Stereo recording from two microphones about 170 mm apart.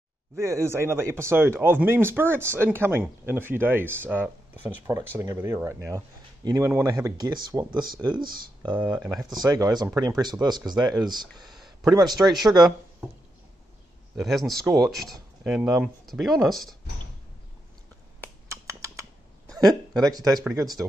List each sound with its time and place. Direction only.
0.4 s speech: 15° right (ahead or behind)
8.9 s speech: 5° right (ahead or behind)
9.3 s speech: 20° right (ahead or behind)
11.3 s a sound: centre (ahead or behind)
11.9 s speech: 25° right (ahead or behind)
12.2 s speech: centre (ahead or behind)
14.1 s speech: centre (ahead or behind)
14.6 s speech: 20° right (ahead or behind)
14.9 s speech: centre (ahead or behind)
18.5 s typing: 15° right (ahead or behind)
19.5 s a sound: centre (ahead or behind)
20.1 s speech: 20° right (ahead or behind)